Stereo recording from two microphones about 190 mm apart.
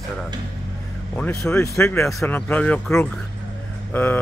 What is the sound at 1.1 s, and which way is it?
Speech, 10° left (ahead or behind).